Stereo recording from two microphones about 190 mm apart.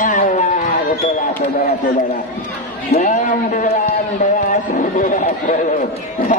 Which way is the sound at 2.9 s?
40° left (ahead or behind).